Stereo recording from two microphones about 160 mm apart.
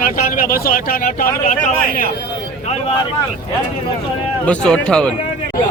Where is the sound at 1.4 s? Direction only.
55° left (ahead or behind).